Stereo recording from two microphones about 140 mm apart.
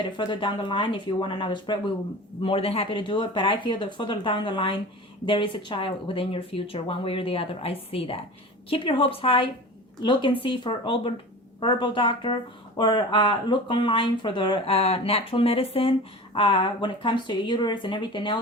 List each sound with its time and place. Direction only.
0.0 s speech: 35° left (ahead or behind)